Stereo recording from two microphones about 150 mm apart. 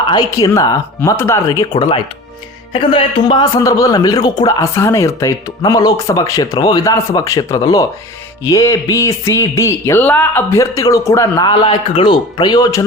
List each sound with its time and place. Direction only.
0.1 s a man's voice: 25° left (ahead or behind)